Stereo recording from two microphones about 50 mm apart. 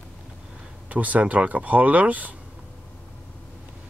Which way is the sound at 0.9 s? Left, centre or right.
Right.